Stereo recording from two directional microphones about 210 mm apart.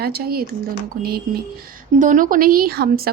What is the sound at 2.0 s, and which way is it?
A woman's voice, 40° right (ahead or behind).